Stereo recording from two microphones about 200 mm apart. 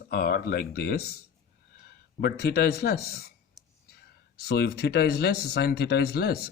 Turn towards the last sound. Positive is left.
turn(degrees=55)  # may be behind; listen again after turning